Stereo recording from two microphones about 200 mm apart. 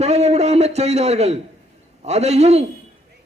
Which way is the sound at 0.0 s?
35° right (ahead or behind).